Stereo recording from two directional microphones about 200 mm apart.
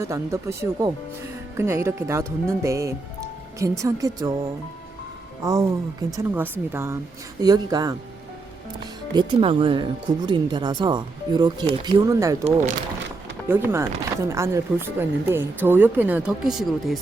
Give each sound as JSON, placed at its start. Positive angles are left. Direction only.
{"t": 0.0, "sound": "speech", "side_deg": -15}
{"t": 5.4, "sound": "speech", "side_deg": -15}
{"t": 13.5, "sound": "speech", "side_deg": -10}